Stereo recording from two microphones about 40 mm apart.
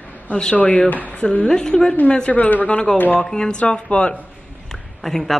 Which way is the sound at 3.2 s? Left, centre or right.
Centre.